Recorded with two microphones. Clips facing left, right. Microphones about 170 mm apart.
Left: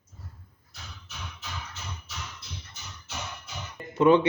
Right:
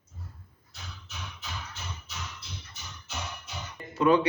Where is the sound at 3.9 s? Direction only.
25° left (ahead or behind).